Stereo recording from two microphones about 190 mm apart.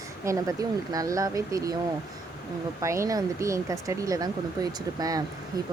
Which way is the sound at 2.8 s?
15° right (ahead or behind).